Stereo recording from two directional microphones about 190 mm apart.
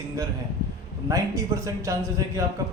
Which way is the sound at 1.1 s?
15° right (ahead or behind).